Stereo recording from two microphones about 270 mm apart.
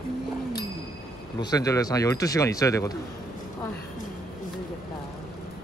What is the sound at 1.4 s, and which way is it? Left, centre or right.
Speech, centre.